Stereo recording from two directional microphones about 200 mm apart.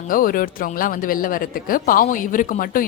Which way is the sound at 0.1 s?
45° left (ahead or behind).